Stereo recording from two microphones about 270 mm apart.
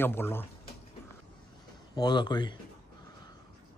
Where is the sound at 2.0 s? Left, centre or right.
Centre.